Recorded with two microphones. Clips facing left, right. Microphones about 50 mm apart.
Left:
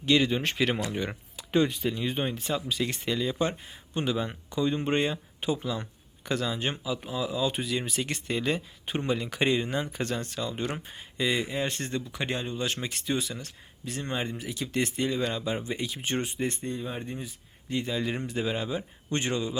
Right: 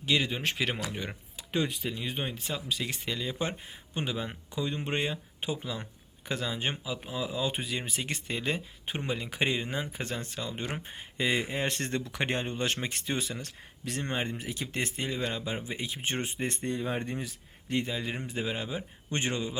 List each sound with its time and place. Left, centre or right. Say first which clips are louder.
0.0 s speech: left 4 dB; centre
10.8 s speech: left 1 dB; right
16.6 s speech: right 2 dB; right
17.9 s speech: left 4 dB; centre